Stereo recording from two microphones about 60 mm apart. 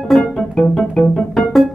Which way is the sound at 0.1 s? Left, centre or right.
Centre.